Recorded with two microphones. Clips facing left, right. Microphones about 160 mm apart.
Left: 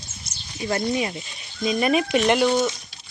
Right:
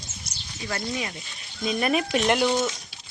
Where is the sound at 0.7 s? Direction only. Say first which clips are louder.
Left 7 dB; 25° left (ahead or behind).